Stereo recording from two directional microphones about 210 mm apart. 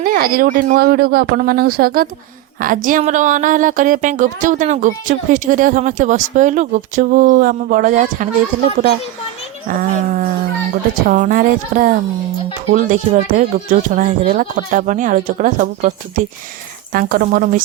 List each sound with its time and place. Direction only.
0.0 s speech: 45° right (ahead or behind)
9.6 s speech: 40° right (ahead or behind)